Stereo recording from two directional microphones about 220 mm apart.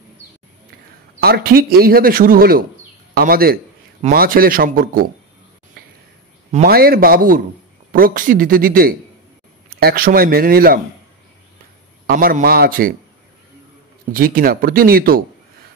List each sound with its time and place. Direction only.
1.2 s speech: 45° right (ahead or behind)
6.5 s speech: 45° right (ahead or behind)
12.1 s speech: 40° right (ahead or behind)
14.1 s speech: 40° right (ahead or behind)